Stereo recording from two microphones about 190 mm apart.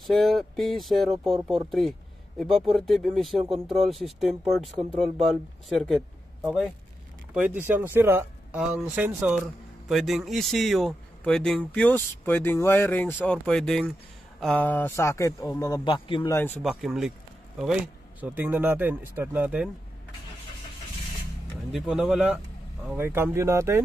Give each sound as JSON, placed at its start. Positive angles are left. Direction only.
{"t": 0.0, "sound": "speech", "side_deg": 0}
{"t": 1.7, "sound": "a sound", "side_deg": 0}
{"t": 2.7, "sound": "speech", "side_deg": 0}
{"t": 16.6, "sound": "speech", "side_deg": 0}
{"t": 18.2, "sound": "speech", "side_deg": -10}
{"t": 21.7, "sound": "speech", "side_deg": -5}